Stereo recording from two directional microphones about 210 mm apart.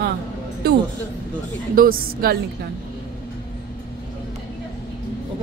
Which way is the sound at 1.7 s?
45° right (ahead or behind).